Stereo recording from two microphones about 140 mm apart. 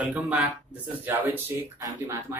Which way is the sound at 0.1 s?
10° right (ahead or behind).